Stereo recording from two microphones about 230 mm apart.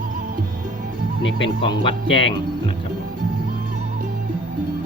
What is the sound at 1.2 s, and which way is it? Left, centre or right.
Speech, left.